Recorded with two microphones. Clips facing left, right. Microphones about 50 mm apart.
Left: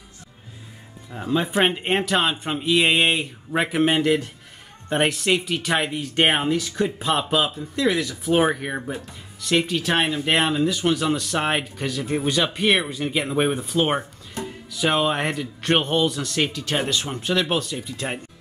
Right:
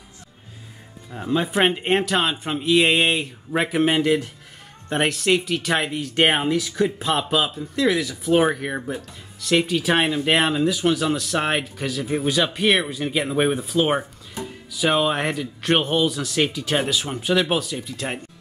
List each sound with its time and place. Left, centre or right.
1.1 s speech: centre